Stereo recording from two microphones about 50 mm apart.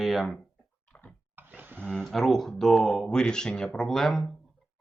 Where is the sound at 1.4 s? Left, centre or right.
Right.